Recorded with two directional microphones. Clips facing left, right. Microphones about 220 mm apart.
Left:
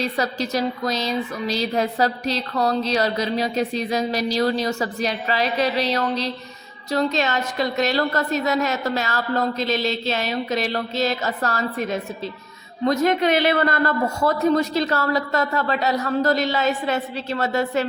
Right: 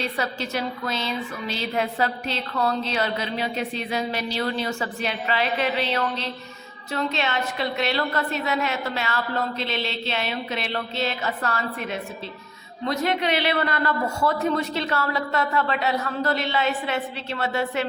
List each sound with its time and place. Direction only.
0.0 s speech: 40° left (ahead or behind)